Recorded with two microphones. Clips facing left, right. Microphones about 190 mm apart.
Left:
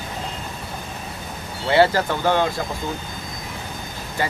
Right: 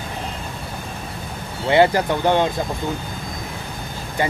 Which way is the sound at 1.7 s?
20° right (ahead or behind).